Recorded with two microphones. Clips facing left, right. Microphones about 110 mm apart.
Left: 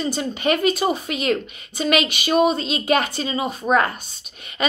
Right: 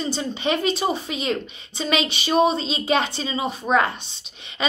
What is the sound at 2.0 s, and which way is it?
Speech, 30° right (ahead or behind).